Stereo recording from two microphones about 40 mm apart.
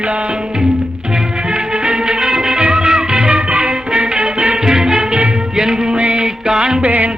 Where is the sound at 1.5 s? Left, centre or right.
Right.